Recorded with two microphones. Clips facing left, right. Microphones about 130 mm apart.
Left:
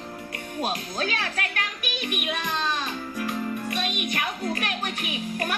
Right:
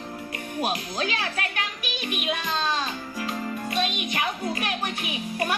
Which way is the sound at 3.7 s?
55° left (ahead or behind).